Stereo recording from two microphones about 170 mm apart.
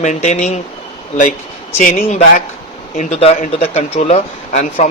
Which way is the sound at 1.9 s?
45° left (ahead or behind).